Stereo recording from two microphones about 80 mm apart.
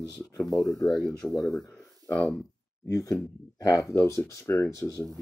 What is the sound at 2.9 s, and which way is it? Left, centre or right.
Speech, left.